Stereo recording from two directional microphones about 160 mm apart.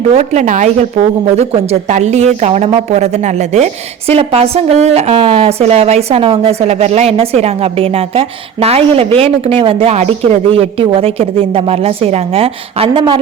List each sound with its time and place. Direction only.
0.1 s a woman's voice: 45° right (ahead or behind)